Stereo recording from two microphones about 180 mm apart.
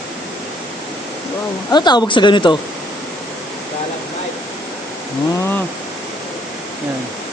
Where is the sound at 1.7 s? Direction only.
25° left (ahead or behind).